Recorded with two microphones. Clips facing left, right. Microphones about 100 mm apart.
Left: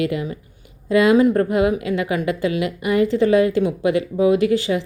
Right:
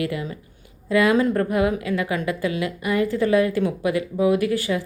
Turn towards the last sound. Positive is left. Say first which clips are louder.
# left 4 dB
turn(degrees=20)  # may be behind; listen again after turning